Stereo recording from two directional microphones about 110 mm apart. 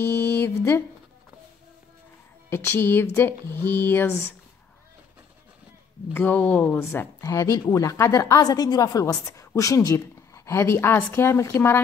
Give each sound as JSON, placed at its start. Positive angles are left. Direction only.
{"t": 0.0, "sound": "speech", "side_deg": 20}
{"t": 2.5, "sound": "a woman's voice", "side_deg": 20}
{"t": 6.1, "sound": "a woman's voice", "side_deg": 15}